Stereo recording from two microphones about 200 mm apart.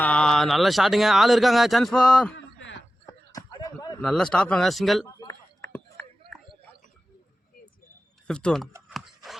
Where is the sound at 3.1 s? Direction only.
20° left (ahead or behind).